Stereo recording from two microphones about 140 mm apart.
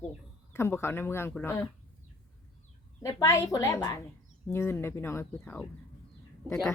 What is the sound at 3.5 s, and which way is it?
A woman's voice, 20° left (ahead or behind).